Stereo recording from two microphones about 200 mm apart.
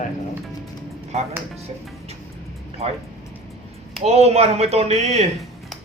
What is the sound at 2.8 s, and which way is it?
Speech, 30° right (ahead or behind).